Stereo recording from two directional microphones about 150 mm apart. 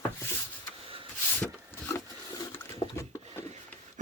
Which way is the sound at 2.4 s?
30° left (ahead or behind).